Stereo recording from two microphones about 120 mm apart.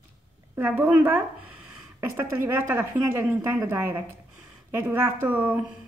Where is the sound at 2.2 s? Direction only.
20° right (ahead or behind).